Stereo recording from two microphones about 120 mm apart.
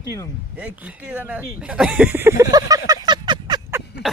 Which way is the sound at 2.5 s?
30° right (ahead or behind).